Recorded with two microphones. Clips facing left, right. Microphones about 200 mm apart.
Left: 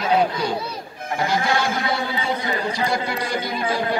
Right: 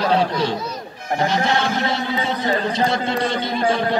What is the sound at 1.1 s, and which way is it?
Speech, 20° right (ahead or behind).